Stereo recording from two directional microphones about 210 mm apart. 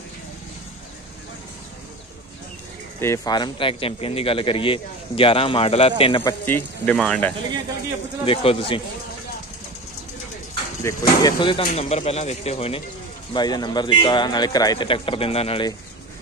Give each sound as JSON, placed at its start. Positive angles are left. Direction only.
{"t": 3.0, "sound": "a man's voice", "side_deg": 15}
{"t": 6.4, "sound": "speech", "side_deg": 10}
{"t": 8.3, "sound": "a man's voice", "side_deg": 25}
{"t": 10.8, "sound": "a man's voice", "side_deg": 15}